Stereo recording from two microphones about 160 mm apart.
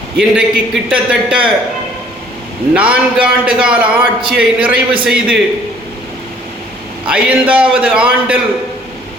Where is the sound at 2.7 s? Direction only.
5° right (ahead or behind).